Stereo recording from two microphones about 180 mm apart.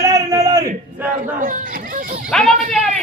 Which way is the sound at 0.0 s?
20° right (ahead or behind).